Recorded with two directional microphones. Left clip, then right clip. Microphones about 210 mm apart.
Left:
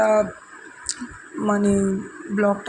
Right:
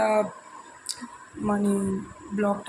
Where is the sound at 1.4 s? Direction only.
20° left (ahead or behind).